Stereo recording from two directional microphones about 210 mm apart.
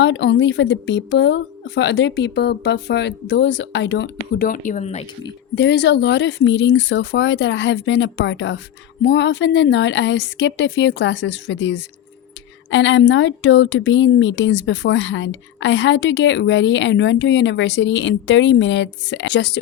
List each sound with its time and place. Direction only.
0.0 s speech: 55° left (ahead or behind)
4.4 s speech: 35° left (ahead or behind)
5.5 s speech: 55° left (ahead or behind)